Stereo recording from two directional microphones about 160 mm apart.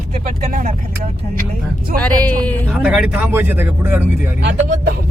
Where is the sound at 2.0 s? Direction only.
10° left (ahead or behind).